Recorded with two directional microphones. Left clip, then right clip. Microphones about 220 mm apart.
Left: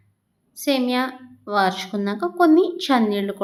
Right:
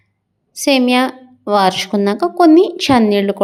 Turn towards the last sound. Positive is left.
turn(degrees=-35)  # may be behind; listen again after turning